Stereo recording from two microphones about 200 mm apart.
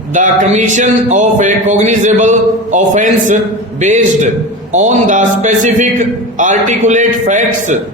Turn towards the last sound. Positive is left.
turn(degrees=-40)  # may be behind; listen again after turning